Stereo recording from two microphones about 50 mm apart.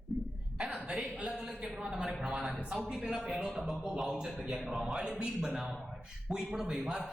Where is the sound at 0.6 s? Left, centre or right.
Right; by 2.8 s centre.